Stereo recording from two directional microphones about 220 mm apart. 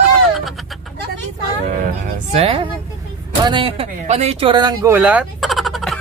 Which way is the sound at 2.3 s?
25° right (ahead or behind).